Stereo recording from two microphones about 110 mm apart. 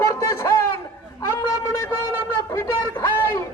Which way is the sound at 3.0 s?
20° left (ahead or behind).